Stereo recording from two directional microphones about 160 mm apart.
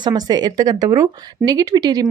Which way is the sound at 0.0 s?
25° right (ahead or behind).